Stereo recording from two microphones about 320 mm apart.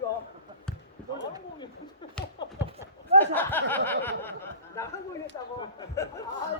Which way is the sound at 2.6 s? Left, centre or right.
Centre.